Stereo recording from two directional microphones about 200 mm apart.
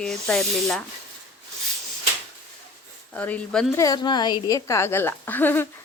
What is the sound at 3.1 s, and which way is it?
Speech, 5° left (ahead or behind).